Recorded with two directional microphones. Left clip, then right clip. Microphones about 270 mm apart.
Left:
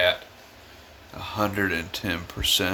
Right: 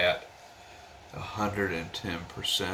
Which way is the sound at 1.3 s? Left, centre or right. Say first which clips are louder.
Left 5 dB; left.